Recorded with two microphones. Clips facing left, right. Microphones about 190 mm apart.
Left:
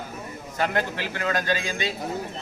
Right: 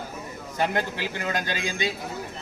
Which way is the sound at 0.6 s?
15° right (ahead or behind).